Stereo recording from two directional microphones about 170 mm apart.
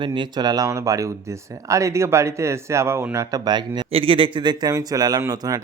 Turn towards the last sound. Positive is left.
turn(degrees=-20)  # may be behind; listen again after turning